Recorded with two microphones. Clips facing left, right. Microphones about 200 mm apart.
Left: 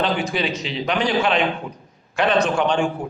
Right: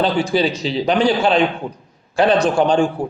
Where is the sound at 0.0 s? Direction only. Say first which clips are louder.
Right 5 dB; 35° right (ahead or behind).